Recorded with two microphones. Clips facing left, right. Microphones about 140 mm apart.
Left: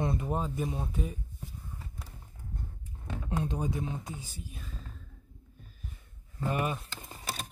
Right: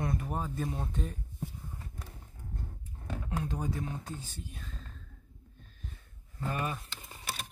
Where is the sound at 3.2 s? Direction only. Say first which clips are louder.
Left 3 dB; 25° left (ahead or behind); by 5.0 s 5° left (ahead or behind).